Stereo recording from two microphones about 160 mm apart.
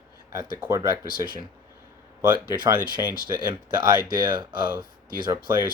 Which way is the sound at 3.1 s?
70° left (ahead or behind).